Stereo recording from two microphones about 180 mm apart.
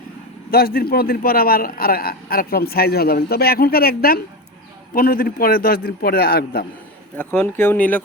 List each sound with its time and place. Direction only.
0.5 s a man's voice: 55° left (ahead or behind)
7.2 s speech: 10° left (ahead or behind)